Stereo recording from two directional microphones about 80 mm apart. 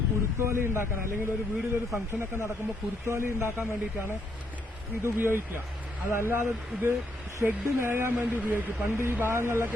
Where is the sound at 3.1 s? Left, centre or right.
Right.